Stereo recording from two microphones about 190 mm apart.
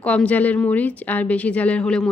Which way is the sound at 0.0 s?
5° left (ahead or behind).